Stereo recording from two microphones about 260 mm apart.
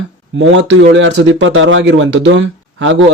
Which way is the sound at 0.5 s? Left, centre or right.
Right.